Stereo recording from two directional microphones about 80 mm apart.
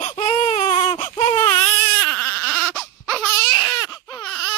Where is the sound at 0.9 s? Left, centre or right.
Left.